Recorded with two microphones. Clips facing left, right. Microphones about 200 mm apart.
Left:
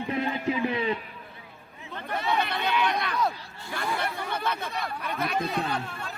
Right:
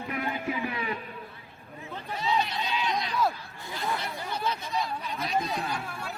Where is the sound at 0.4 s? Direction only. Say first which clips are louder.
Left 5 dB; 15° left (ahead or behind).